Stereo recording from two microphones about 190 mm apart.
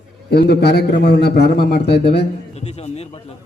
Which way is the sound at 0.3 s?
60° left (ahead or behind).